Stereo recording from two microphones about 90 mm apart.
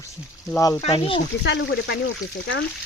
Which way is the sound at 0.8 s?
85° left.